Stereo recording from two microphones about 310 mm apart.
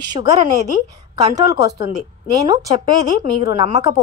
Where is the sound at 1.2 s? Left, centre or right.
Centre.